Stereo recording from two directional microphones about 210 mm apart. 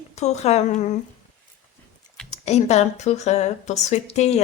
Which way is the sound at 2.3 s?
30° left (ahead or behind).